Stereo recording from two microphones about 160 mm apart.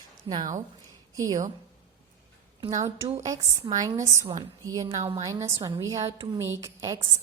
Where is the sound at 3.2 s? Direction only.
20° right (ahead or behind).